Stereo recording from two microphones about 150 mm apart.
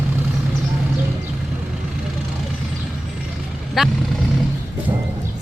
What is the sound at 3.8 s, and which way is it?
Speech, 5° right (ahead or behind).